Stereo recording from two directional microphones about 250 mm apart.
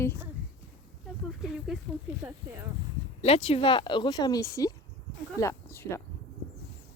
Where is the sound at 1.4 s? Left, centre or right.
Centre.